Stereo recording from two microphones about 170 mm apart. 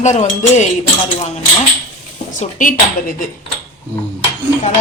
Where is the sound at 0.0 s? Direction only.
40° left (ahead or behind).